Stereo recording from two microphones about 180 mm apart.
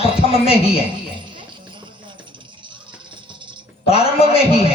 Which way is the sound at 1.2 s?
25° right (ahead or behind).